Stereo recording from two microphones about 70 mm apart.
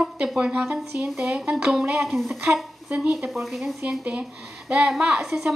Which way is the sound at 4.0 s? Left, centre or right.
Centre.